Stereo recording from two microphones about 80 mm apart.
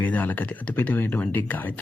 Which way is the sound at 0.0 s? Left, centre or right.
Left.